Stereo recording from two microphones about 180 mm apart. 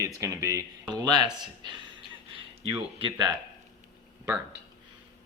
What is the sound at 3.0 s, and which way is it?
Speech, 25° right (ahead or behind).